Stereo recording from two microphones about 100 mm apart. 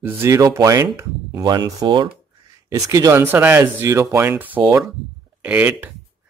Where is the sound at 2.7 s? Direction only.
35° right (ahead or behind).